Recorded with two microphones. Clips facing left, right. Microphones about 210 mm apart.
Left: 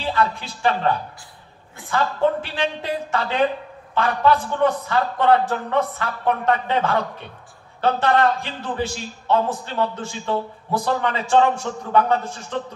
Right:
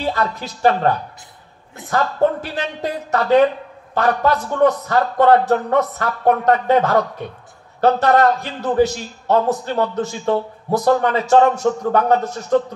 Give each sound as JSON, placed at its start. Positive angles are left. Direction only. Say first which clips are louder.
{"t": 0.0, "sound": "a man's voice", "louder": "right 1 dB", "side_deg": -40}